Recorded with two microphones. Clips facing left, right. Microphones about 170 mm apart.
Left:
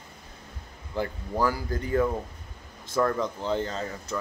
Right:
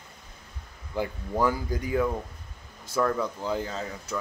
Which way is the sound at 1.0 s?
15° right (ahead or behind).